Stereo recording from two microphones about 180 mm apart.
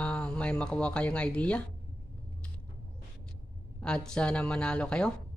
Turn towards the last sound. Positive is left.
turn(degrees=5)  # may be behind; listen again after turning